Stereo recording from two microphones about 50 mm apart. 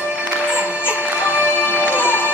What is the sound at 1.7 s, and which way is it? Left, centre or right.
Music, left.